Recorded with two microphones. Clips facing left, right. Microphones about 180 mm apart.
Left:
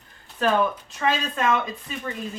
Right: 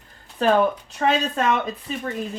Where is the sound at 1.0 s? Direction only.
40° right (ahead or behind).